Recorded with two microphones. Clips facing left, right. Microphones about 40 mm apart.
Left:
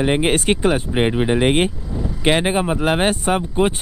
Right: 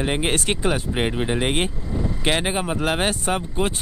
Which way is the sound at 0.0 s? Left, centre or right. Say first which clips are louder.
Left 5 dB; left.